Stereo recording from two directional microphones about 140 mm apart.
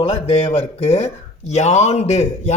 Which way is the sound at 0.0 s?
45° left (ahead or behind).